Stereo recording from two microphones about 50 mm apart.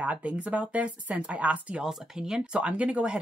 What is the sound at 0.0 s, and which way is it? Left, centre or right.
Speech, right.